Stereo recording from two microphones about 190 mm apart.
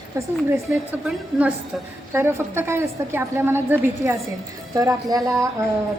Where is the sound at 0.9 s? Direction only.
5° right (ahead or behind).